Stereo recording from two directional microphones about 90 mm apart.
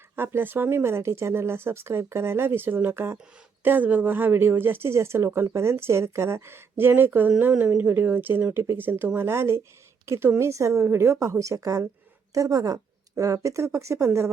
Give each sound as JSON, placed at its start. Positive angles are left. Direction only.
{"t": 0.2, "sound": "a woman's voice", "side_deg": -25}